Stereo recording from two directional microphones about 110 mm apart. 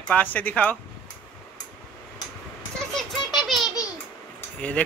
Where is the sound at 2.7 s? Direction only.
Centre (ahead or behind).